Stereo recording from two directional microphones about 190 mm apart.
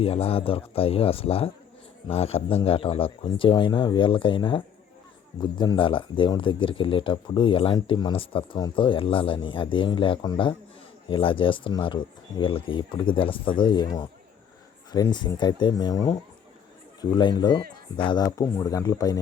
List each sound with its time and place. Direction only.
0.0 s speech: 30° left (ahead or behind)